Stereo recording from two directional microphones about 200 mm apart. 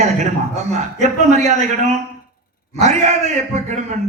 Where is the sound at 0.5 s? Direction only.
35° right (ahead or behind).